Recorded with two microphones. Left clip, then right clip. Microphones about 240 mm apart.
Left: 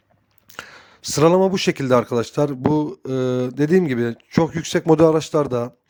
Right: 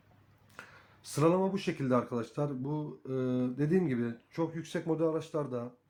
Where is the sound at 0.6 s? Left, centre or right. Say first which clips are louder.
Left 15 dB; left.